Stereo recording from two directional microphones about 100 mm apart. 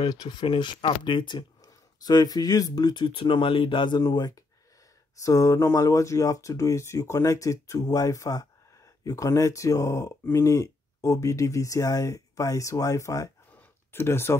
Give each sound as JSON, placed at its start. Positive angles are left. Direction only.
{"t": 0.0, "sound": "speech", "side_deg": 40}
{"t": 1.6, "sound": "speech", "side_deg": 40}
{"t": 3.1, "sound": "speech", "side_deg": 60}
{"t": 4.0, "sound": "speech", "side_deg": 40}
{"t": 13.6, "sound": "a sound", "side_deg": 25}